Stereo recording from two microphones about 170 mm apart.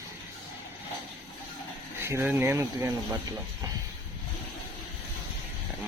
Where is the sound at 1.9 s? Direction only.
15° right (ahead or behind).